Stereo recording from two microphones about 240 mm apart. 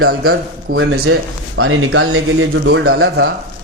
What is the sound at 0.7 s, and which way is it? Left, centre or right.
Speech, right.